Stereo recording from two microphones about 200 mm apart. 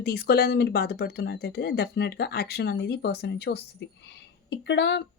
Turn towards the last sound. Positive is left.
turn(degrees=60)  # may be behind; listen again after turning